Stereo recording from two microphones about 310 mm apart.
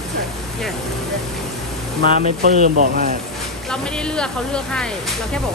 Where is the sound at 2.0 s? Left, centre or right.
Right.